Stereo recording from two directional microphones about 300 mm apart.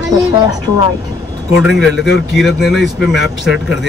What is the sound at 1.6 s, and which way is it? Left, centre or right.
Speech, centre.